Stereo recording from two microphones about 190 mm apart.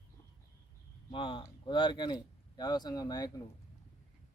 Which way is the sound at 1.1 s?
25° left (ahead or behind).